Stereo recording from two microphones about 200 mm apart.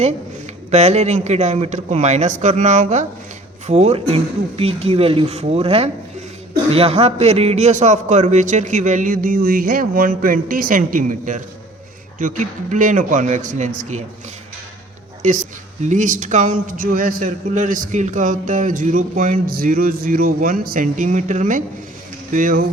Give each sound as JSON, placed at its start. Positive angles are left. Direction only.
{"t": 0.7, "sound": "a man's voice", "side_deg": -35}
{"t": 15.8, "sound": "a man's voice", "side_deg": -40}